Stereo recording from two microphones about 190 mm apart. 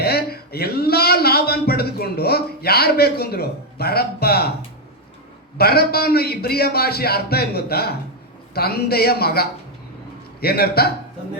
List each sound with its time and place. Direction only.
0.0 s a man's voice: 55° left (ahead or behind)
5.5 s a man's voice: 55° left (ahead or behind)